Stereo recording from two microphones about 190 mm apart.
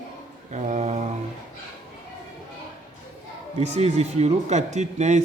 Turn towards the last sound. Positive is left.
turn(degrees=-35)  # may be behind; listen again after turning